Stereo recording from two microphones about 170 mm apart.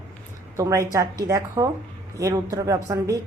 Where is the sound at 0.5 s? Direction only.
20° right (ahead or behind).